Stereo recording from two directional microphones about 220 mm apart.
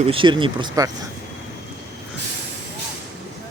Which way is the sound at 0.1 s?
20° right (ahead or behind).